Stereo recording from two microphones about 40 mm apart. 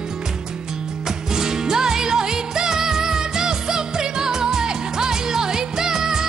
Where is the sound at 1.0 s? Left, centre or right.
Centre.